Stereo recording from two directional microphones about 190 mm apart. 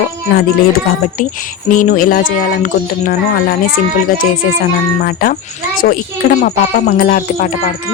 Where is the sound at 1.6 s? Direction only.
45° left (ahead or behind).